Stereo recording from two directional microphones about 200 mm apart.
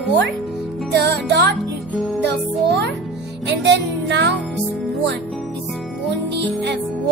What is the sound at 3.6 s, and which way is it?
Music, 60° right (ahead or behind).